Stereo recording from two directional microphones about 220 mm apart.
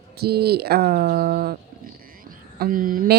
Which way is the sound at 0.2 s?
45° right (ahead or behind).